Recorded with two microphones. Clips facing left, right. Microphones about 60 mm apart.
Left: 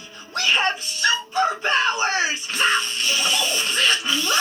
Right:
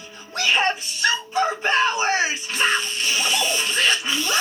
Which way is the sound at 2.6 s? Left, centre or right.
Right.